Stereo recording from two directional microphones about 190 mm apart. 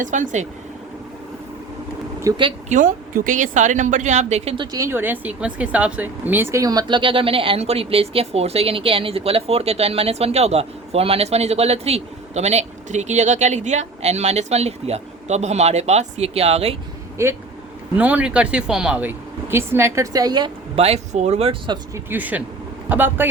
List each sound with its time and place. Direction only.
0.0 s speech: 40° right (ahead or behind)
2.3 s speech: 15° right (ahead or behind)
2.6 s speech: 45° right (ahead or behind)
17.2 s speech: 15° right (ahead or behind); by 21.8 s 30° right (ahead or behind)
21.9 s speech: 10° right (ahead or behind)